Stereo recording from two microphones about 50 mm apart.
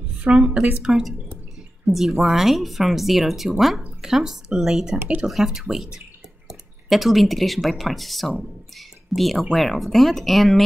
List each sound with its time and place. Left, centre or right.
0.2 s speech: centre
1.9 s speech: centre